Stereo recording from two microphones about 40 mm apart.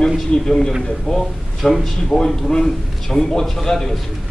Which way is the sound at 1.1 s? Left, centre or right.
Centre.